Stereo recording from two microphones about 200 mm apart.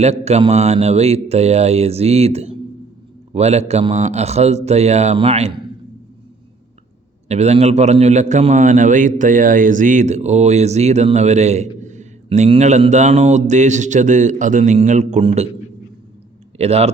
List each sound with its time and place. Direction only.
0.0 s a man's voice: 30° right (ahead or behind)
7.3 s a man's voice: 35° right (ahead or behind)
16.6 s speech: 30° right (ahead or behind)